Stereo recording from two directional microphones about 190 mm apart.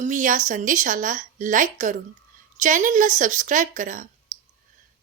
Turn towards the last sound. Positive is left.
turn(degrees=-45)  # may be behind; listen again after turning